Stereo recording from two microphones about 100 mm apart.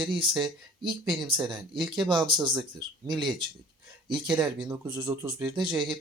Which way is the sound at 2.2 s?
50° right (ahead or behind).